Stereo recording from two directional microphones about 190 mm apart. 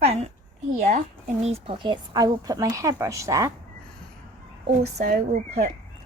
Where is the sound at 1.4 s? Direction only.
30° right (ahead or behind); by 3.5 s 15° right (ahead or behind).